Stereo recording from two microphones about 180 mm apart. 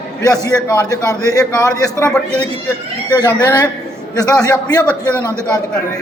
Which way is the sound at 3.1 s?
20° left (ahead or behind).